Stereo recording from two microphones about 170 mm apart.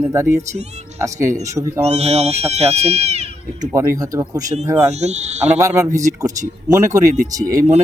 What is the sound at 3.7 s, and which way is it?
Speech, 20° right (ahead or behind).